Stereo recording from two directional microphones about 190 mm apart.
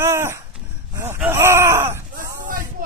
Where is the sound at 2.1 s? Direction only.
45° right (ahead or behind).